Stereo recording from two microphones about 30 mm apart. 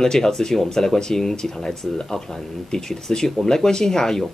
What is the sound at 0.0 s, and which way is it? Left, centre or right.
Speech, centre.